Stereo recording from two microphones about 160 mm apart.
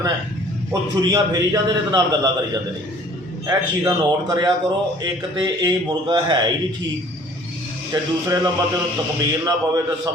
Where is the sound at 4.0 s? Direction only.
25° right (ahead or behind).